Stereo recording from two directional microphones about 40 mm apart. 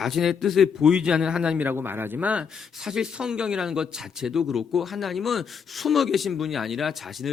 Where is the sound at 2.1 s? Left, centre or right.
Right.